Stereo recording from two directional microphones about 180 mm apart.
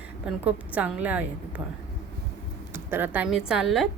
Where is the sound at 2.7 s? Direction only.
10° right (ahead or behind).